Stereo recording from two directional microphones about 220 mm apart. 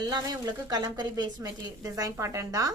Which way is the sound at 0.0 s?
15° right (ahead or behind).